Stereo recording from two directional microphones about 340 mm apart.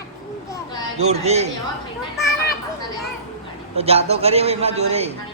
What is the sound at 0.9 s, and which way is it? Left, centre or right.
Speech, centre.